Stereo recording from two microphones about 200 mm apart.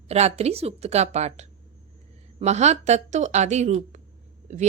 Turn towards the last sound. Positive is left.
turn(degrees=-35)  # may be behind; listen again after turning